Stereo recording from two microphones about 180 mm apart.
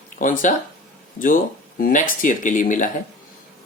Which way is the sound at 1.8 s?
50° left (ahead or behind).